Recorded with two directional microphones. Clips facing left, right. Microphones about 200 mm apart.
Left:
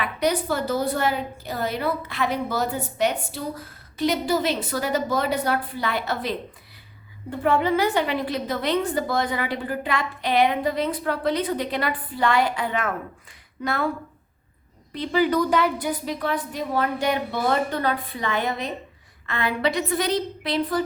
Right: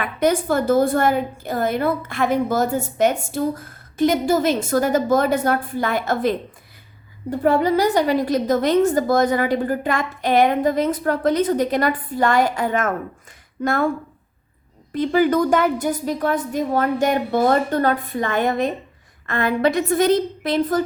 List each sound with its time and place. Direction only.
0.0 s a woman's voice: 50° right (ahead or behind)
14.9 s a woman's voice: 50° right (ahead or behind)